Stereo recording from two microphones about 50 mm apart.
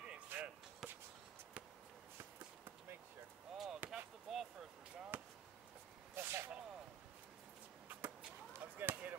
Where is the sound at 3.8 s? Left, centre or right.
Right.